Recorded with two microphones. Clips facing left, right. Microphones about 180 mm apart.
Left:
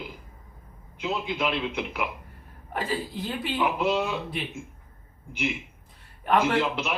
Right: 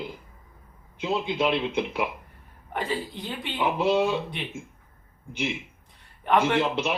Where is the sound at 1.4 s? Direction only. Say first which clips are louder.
Right 3 dB; 25° right (ahead or behind).